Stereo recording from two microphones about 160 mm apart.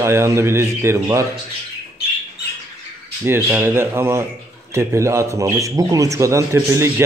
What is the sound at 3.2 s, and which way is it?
A man's voice, 15° right (ahead or behind).